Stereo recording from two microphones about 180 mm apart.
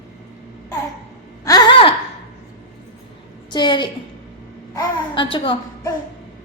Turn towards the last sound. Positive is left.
turn(degrees=30)  # may be behind; listen again after turning